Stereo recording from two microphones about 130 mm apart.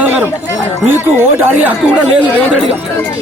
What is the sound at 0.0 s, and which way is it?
Chatter, 10° right (ahead or behind).